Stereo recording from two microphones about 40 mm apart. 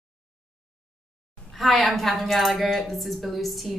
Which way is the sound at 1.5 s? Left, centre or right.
Centre.